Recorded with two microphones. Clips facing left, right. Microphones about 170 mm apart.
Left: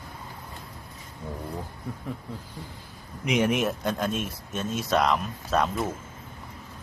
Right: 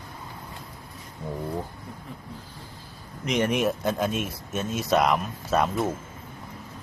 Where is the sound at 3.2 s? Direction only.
5° left (ahead or behind).